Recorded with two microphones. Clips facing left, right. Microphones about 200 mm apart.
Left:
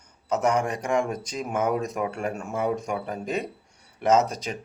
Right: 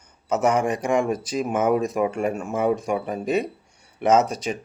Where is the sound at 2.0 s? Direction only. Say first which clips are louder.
Right 6 dB; 15° right (ahead or behind).